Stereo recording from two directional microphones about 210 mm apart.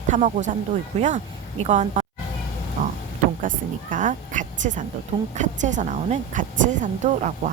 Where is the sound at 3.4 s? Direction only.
40° right (ahead or behind).